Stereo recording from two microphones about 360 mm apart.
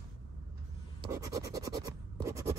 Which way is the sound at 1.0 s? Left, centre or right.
Centre.